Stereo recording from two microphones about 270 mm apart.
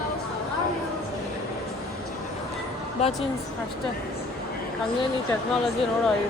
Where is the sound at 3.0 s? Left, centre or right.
Left.